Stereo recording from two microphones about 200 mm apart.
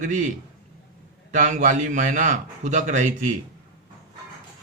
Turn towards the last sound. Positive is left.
turn(degrees=-40)  # may be behind; listen again after turning